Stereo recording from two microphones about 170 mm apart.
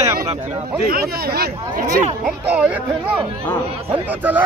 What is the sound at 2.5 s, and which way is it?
Speech, 10° right (ahead or behind).